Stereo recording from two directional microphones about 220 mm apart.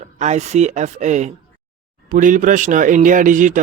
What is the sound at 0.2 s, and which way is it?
Speech, 30° right (ahead or behind).